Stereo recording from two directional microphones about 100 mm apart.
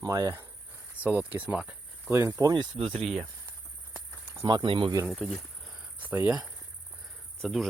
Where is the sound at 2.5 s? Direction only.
55° right (ahead or behind).